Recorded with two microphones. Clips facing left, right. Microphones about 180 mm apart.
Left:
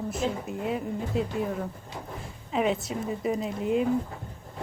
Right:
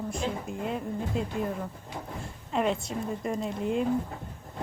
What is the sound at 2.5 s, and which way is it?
Speech, 5° left (ahead or behind).